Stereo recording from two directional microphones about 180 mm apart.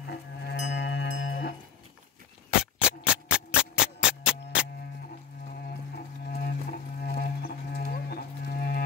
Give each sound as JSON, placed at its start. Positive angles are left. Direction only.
{"t": 0.0, "sound": "music", "side_deg": 65}
{"t": 2.6, "sound": "music", "side_deg": -5}
{"t": 5.9, "sound": "music", "side_deg": 50}